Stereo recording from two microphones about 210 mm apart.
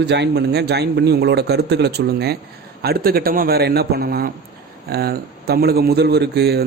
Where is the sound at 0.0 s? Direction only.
55° right (ahead or behind).